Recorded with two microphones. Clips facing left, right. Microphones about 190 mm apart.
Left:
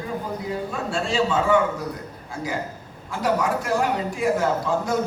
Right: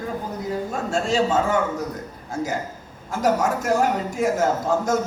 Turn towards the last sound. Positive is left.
turn(degrees=-45)  # may be behind; listen again after turning